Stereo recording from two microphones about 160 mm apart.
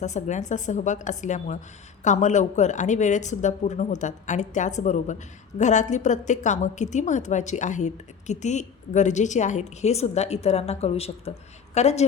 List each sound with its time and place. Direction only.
0.0 s a woman's voice: 50° left (ahead or behind)